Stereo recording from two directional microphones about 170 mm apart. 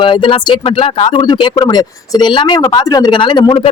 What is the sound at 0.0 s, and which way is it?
Speech, 30° left (ahead or behind).